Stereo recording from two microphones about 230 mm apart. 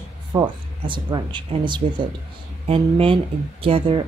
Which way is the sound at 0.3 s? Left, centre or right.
Centre.